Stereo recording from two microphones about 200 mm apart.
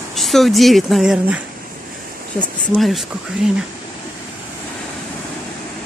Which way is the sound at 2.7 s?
Centre (ahead or behind).